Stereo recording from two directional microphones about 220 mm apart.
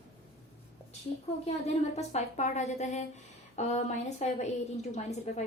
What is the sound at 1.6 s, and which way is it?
A woman's voice, 30° left (ahead or behind).